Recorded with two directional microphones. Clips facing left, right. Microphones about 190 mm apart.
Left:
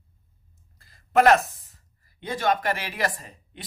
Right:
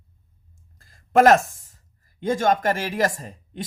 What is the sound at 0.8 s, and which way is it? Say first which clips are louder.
Speech: right 3 dB; 45° right (ahead or behind).